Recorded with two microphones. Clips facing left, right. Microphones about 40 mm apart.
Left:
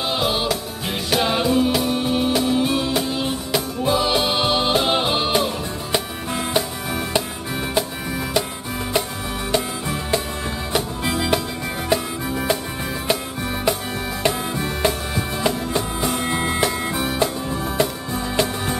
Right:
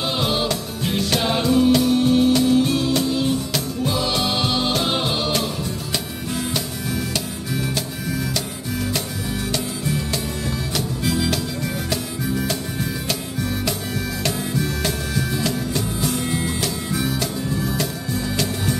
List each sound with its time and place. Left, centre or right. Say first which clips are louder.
0.1 s music: left 2 dB; centre; by 7.2 s left
9.5 s music: left 4 dB; left